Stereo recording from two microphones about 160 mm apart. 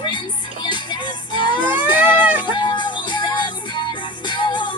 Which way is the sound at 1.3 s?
30° left (ahead or behind).